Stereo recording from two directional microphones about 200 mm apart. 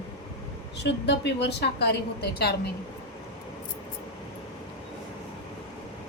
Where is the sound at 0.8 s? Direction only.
60° left (ahead or behind).